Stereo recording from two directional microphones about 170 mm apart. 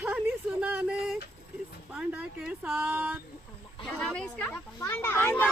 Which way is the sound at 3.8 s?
5° left (ahead or behind).